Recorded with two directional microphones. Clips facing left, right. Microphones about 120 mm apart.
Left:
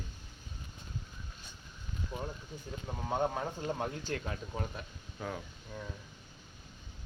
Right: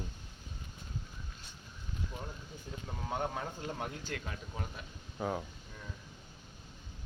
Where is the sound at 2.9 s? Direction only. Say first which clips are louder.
Left 4 dB; 25° left (ahead or behind).